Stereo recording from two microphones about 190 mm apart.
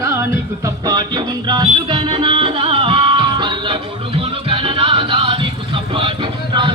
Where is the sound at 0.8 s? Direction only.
20° right (ahead or behind).